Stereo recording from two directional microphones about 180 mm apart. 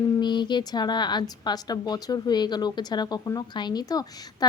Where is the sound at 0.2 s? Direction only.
25° left (ahead or behind).